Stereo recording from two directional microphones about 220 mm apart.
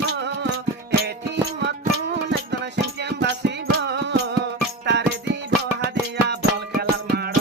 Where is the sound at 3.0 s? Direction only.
50° right (ahead or behind).